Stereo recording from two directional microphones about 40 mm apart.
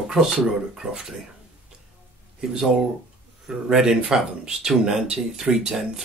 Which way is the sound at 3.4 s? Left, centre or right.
Centre.